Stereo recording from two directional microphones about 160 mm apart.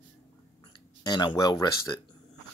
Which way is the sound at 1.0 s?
25° left (ahead or behind).